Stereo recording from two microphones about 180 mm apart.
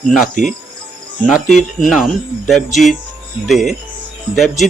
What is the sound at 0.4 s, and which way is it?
Cricket, 45° left (ahead or behind).